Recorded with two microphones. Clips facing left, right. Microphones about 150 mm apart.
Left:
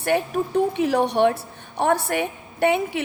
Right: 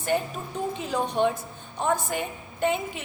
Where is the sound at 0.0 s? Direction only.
65° left (ahead or behind).